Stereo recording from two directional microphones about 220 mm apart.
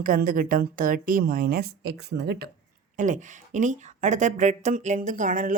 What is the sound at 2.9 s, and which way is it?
Speech, 35° right (ahead or behind).